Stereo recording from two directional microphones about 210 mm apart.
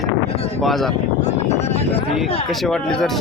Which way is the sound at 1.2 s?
30° left (ahead or behind).